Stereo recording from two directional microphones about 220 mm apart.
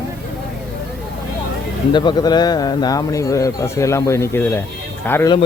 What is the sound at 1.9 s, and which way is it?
A man's voice, 20° left (ahead or behind).